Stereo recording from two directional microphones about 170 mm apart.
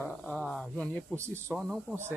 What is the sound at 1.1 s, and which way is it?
Speech, 15° right (ahead or behind).